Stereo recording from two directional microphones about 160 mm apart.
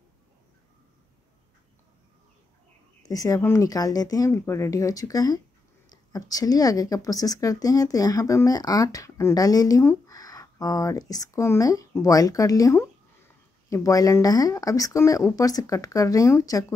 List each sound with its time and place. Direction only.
3.0 s speech: 20° left (ahead or behind)